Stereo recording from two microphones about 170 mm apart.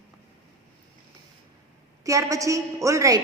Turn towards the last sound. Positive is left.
turn(degrees=-20)  # may be behind; listen again after turning